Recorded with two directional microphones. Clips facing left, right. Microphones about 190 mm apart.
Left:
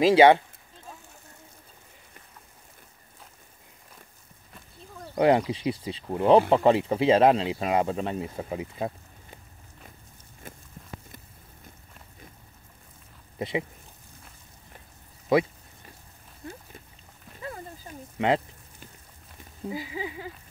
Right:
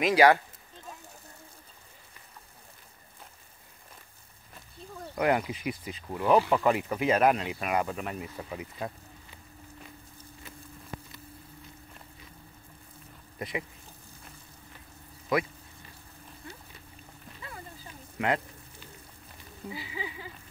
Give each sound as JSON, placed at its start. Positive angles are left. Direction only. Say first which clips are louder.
{"t": 0.0, "sound": "speech", "louder": "left 5 dB", "side_deg": 25}
{"t": 5.1, "sound": "speech", "louder": "left 6 dB", "side_deg": 30}
{"t": 10.4, "sound": "a sound", "louder": "left 6 dB", "side_deg": 50}
{"t": 13.4, "sound": "speech", "louder": "left 6 dB", "side_deg": 25}
{"t": 15.3, "sound": "speech", "louder": "left 6 dB", "side_deg": 30}
{"t": 17.4, "sound": "a sound", "louder": "left 7 dB", "side_deg": 45}
{"t": 19.7, "sound": "speech", "louder": "left 6 dB", "side_deg": 45}